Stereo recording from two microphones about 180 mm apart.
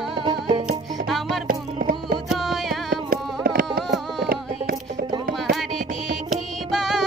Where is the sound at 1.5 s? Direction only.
55° right (ahead or behind).